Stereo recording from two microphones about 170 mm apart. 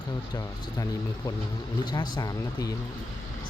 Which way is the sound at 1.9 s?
25° left (ahead or behind).